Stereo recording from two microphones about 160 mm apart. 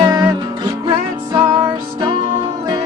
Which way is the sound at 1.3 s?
25° right (ahead or behind).